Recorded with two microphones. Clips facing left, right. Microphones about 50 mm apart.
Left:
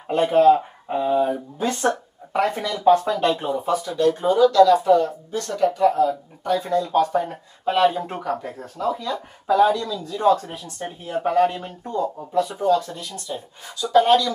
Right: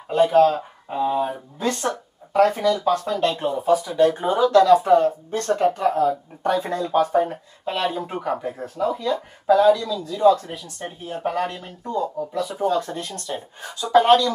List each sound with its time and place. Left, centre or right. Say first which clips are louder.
0.1 s speech: left 1 dB; left
0.9 s speech: left 2 dB; centre
2.3 s speech: right 5 dB; centre
3.1 s speech: left 1 dB; centre
4.0 s speech: left 4 dB; right
4.5 s speech: right 2 dB; right
6.9 s speech: right 2 dB; centre
7.6 s speech: left 6 dB; centre
9.5 s speech: right 2 dB; centre
12.6 s speech: left 2 dB; right